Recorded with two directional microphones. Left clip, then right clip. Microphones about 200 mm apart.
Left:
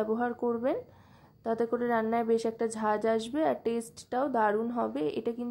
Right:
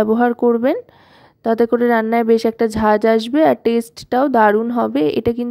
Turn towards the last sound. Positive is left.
turn(degrees=-40)  # may be behind; listen again after turning